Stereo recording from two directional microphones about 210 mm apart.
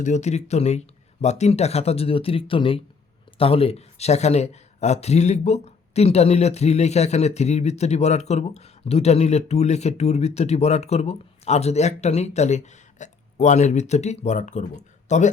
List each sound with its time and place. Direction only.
0.0 s speech: 35° left (ahead or behind)